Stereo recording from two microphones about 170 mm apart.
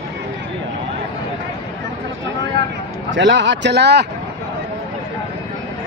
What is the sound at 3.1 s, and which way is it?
Speech, 90° right.